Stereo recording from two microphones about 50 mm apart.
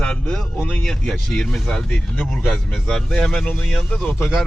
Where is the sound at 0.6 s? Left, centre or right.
Left.